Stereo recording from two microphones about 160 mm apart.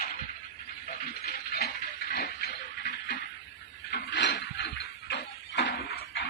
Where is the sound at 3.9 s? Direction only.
90° left.